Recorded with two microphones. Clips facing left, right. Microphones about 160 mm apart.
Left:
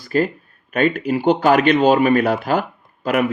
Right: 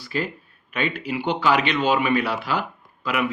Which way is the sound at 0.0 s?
45° left (ahead or behind).